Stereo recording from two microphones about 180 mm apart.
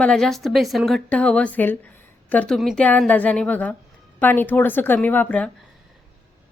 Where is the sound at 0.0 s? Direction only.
5° left (ahead or behind).